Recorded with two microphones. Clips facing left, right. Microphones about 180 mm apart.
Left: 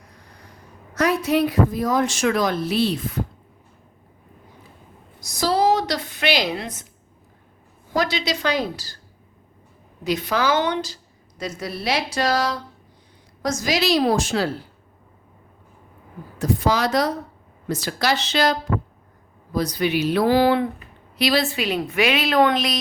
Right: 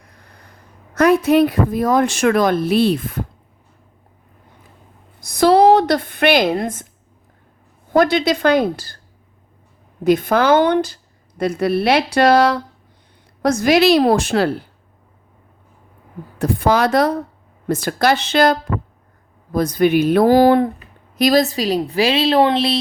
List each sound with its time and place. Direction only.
0.9 s a woman's voice: 50° right (ahead or behind)
5.2 s a sound: 60° right (ahead or behind)
7.9 s a woman's voice: 55° right (ahead or behind)
10.0 s a woman's voice: 50° right (ahead or behind)
16.4 s a woman's voice: 55° right (ahead or behind)
19.5 s a woman's voice: 50° right (ahead or behind); by 22.8 s 30° right (ahead or behind)